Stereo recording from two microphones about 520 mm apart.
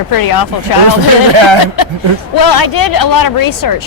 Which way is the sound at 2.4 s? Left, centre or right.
Left.